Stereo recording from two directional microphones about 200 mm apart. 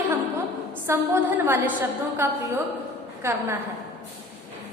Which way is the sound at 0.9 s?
10° right (ahead or behind).